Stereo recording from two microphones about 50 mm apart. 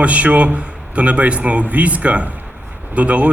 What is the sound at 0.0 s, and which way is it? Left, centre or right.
A man's voice, right.